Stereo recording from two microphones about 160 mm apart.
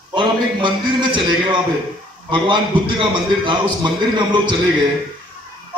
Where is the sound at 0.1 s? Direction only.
30° right (ahead or behind).